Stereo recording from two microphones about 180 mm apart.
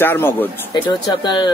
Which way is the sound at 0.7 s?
25° left (ahead or behind).